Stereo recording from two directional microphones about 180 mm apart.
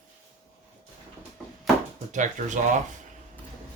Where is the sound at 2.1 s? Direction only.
45° right (ahead or behind).